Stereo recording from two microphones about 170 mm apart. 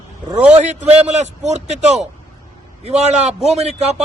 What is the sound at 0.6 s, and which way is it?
Speech, 45° right (ahead or behind).